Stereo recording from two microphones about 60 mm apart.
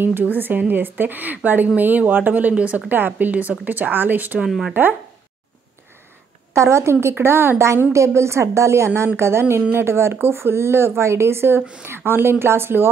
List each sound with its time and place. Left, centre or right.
0.0 s speech: right
4.5 s speech: centre
6.5 s a woman's voice: right